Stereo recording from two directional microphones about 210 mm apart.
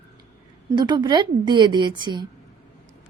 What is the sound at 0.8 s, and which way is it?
A woman's voice, 20° right (ahead or behind).